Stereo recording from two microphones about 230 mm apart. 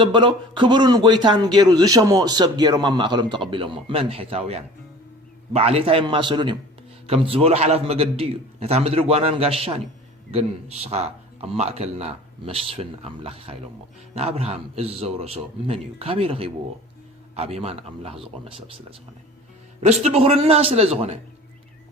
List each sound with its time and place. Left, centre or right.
0.0 s a man's voice: right